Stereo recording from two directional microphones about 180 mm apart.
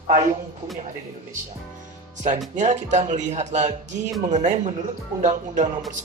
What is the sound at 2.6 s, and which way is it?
Speech, 40° right (ahead or behind).